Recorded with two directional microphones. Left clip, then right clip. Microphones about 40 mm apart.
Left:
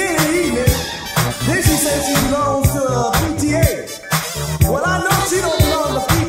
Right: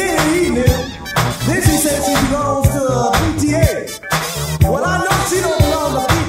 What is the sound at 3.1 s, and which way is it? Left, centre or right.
Music, right.